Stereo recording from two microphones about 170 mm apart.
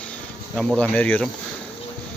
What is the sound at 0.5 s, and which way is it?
Speech, centre (ahead or behind).